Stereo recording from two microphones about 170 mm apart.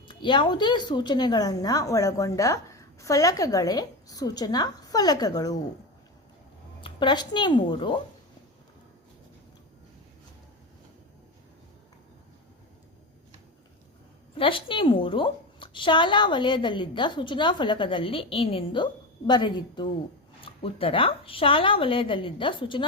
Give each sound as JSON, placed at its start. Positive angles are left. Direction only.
{"t": 0.1, "sound": "a woman's voice", "side_deg": 25}
{"t": 6.8, "sound": "a woman's voice", "side_deg": 25}
{"t": 14.3, "sound": "a woman's voice", "side_deg": 30}